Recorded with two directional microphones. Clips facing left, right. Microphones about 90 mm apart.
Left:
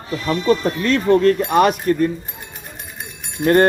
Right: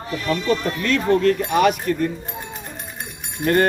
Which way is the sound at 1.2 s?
40° left (ahead or behind).